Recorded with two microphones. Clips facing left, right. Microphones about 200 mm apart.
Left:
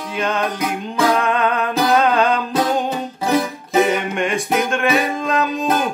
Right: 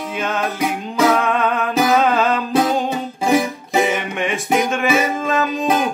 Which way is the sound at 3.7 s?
Centre (ahead or behind).